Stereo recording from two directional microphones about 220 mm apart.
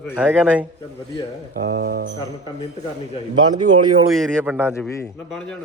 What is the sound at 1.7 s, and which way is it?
Speech, 45° right (ahead or behind).